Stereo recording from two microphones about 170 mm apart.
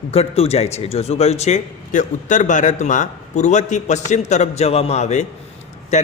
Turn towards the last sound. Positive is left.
turn(degrees=40)  # may be behind; listen again after turning